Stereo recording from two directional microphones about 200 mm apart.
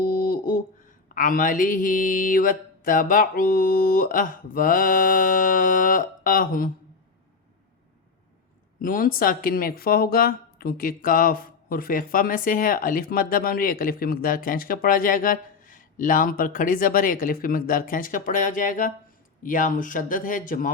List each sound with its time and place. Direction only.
0.0 s a sound: 45° left (ahead or behind)
1.1 s speech: 45° left (ahead or behind)
8.8 s speech: 45° left (ahead or behind)